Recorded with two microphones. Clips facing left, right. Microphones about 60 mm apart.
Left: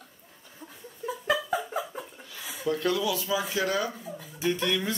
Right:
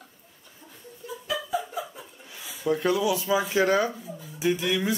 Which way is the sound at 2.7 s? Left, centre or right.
Centre.